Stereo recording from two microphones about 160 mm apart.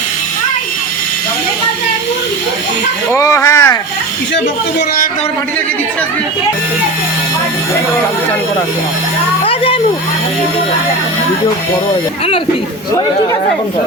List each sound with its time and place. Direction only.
3.1 s speech: 20° left (ahead or behind)